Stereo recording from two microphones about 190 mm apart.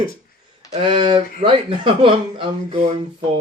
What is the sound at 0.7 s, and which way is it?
Speech, 25° right (ahead or behind).